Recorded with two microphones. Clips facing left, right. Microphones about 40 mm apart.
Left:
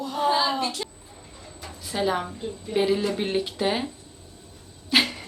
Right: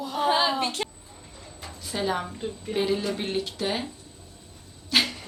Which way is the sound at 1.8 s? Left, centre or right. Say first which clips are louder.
Left 2 dB; centre.